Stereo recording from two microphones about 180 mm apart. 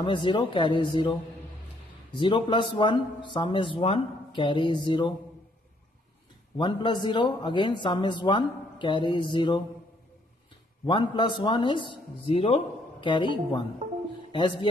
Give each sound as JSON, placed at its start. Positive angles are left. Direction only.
{"t": 0.0, "sound": "speech", "side_deg": 25}
{"t": 2.1, "sound": "speech", "side_deg": 25}
{"t": 6.5, "sound": "speech", "side_deg": 25}
{"t": 10.9, "sound": "speech", "side_deg": 25}